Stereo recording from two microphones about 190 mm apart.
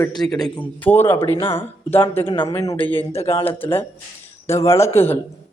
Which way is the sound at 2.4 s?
15° left (ahead or behind).